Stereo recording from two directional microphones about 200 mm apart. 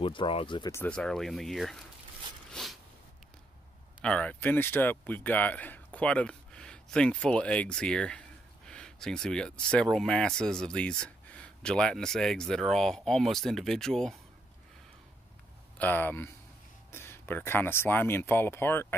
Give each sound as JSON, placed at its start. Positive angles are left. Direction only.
{"t": 0.0, "sound": "speech", "side_deg": 25}
{"t": 0.7, "sound": "speech", "side_deg": 5}
{"t": 2.5, "sound": "a sound", "side_deg": 0}
{"t": 4.0, "sound": "speech", "side_deg": 5}
{"t": 15.8, "sound": "speech", "side_deg": 10}